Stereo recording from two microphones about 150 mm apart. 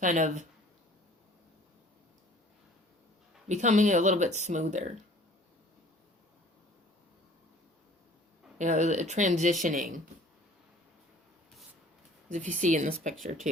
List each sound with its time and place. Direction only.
0.0 s speech: 55° right (ahead or behind)
3.5 s speech: 50° right (ahead or behind)
8.5 s speech: 55° right (ahead or behind)
12.3 s speech: 55° right (ahead or behind)